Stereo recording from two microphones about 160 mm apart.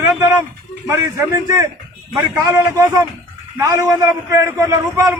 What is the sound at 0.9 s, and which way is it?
A man's voice, 20° right (ahead or behind).